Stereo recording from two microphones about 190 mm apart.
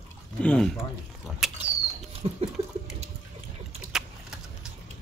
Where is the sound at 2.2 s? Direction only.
30° right (ahead or behind).